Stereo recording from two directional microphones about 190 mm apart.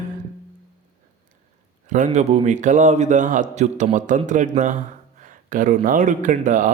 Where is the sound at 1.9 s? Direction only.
40° right (ahead or behind).